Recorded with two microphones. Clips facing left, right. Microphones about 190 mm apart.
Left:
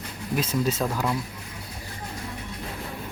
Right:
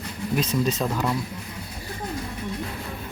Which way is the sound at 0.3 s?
5° left (ahead or behind).